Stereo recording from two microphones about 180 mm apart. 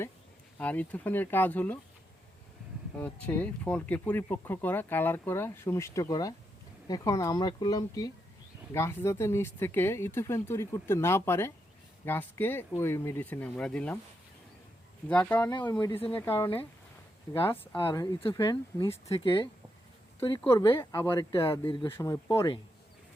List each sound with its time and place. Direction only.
0.6 s speech: 10° left (ahead or behind)
3.0 s speech: 10° left (ahead or behind)
15.1 s speech: 10° left (ahead or behind)
20.4 s speech: 15° left (ahead or behind)
21.7 s speech: 30° left (ahead or behind)